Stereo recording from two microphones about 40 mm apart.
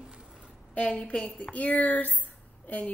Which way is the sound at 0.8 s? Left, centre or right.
Left.